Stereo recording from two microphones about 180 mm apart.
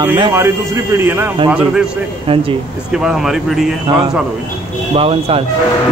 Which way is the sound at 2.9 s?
5° right (ahead or behind).